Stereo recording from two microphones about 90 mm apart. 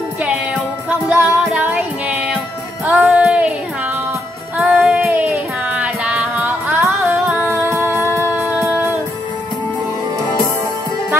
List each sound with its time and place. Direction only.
1.1 s music: 30° right (ahead or behind)
1.5 s music: 15° right (ahead or behind)
4.6 s music: 5° right (ahead or behind)
4.9 s music: 20° right (ahead or behind)